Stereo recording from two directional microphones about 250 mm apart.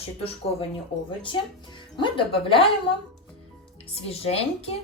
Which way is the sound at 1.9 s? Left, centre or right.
Centre.